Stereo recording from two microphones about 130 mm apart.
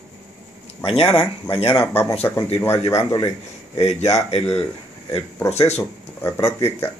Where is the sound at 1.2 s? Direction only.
45° left (ahead or behind).